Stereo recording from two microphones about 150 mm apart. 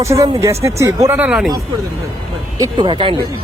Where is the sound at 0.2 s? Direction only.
20° right (ahead or behind).